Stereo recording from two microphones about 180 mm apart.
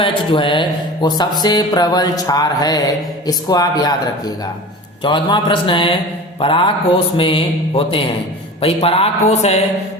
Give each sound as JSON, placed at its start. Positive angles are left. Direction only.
{"t": 0.0, "sound": "a man's voice", "side_deg": 30}